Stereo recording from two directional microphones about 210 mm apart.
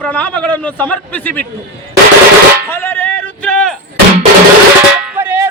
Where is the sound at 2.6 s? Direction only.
10° left (ahead or behind).